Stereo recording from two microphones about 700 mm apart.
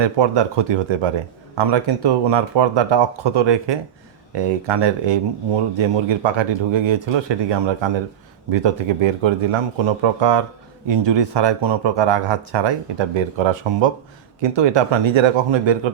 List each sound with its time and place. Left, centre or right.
0.2 s speech: right